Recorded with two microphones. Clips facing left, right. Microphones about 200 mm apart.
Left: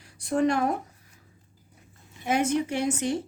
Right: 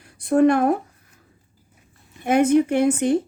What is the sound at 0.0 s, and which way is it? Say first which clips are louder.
Speech: right 8 dB; 55° right (ahead or behind).